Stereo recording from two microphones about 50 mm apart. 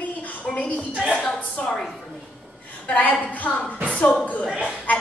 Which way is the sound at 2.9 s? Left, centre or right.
Left.